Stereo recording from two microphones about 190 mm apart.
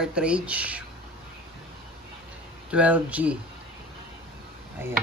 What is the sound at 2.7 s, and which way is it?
Speech, 5° right (ahead or behind).